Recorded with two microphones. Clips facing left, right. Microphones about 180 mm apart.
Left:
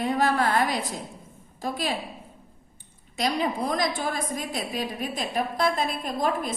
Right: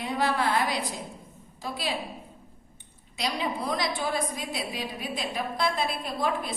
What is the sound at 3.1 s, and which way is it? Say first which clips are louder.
A woman's voice: left 4 dB; 45° left (ahead or behind).